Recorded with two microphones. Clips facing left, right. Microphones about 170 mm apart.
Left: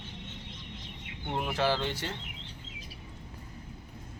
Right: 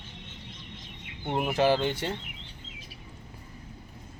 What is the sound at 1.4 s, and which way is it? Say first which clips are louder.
Speech: right 5 dB; 20° right (ahead or behind).